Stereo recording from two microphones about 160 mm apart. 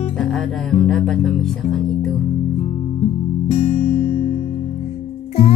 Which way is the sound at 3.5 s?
40° left (ahead or behind).